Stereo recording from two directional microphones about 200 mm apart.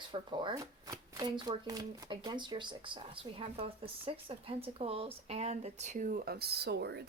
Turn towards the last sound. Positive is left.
turn(degrees=-55)  # may be behind; listen again after turning